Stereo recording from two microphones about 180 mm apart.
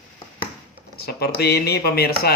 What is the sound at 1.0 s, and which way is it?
Speech, 60° left (ahead or behind).